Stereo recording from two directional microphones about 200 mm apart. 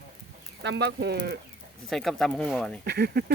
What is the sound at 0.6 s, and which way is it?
Speech, 60° right (ahead or behind).